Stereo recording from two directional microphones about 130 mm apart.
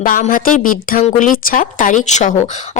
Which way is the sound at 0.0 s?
90° left.